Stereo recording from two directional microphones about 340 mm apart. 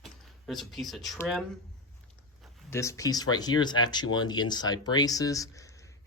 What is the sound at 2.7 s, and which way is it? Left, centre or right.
Speech, centre.